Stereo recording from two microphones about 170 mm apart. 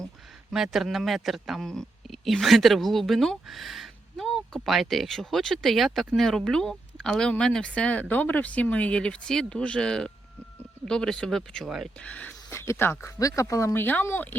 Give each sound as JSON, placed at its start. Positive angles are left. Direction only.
{"t": 0.5, "sound": "speech", "side_deg": 0}